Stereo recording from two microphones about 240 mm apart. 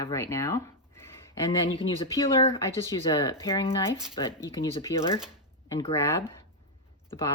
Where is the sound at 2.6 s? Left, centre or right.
Centre.